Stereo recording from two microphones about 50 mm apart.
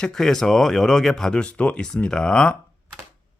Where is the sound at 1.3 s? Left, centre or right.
Left.